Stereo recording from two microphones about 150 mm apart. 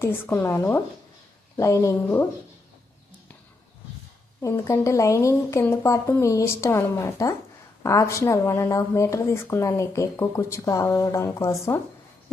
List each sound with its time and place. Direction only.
0.0 s a woman's voice: 15° left (ahead or behind)
4.4 s speech: 20° left (ahead or behind)